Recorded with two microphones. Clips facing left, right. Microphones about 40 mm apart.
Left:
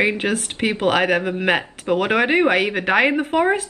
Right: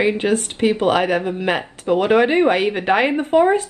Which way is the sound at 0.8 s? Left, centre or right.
Centre.